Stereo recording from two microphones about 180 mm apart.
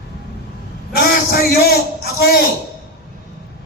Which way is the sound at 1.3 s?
60° left (ahead or behind).